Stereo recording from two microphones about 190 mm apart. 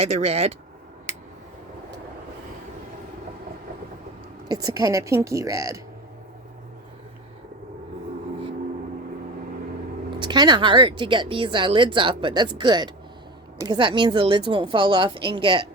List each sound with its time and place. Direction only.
0.0 s speech: 35° right (ahead or behind)
4.4 s a woman's voice: 20° right (ahead or behind)
10.2 s speech: 25° right (ahead or behind)